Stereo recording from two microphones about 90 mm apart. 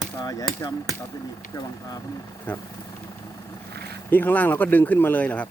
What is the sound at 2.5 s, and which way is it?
Speech, 15° left (ahead or behind).